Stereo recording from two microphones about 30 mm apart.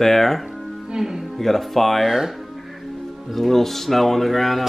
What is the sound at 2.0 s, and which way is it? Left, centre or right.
Speech, centre.